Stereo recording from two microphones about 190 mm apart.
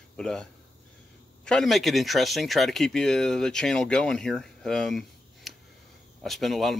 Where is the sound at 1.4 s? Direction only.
Centre (ahead or behind).